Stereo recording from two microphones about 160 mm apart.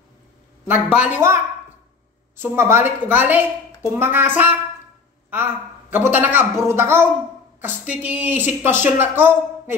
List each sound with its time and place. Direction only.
0.7 s a man's voice: 10° right (ahead or behind)